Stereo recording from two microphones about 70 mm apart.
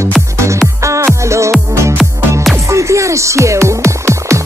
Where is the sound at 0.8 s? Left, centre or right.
Right.